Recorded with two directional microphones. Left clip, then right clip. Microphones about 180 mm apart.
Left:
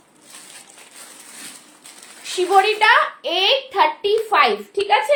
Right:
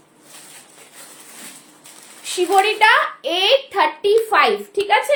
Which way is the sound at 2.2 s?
20° right (ahead or behind).